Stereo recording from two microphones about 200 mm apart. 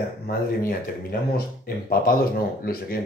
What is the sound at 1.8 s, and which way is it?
Speech, 50° left (ahead or behind).